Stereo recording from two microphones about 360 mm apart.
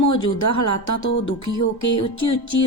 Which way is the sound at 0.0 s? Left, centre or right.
Left.